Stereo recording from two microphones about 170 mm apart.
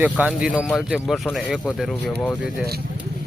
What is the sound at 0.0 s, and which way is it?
Speech, 5° right (ahead or behind).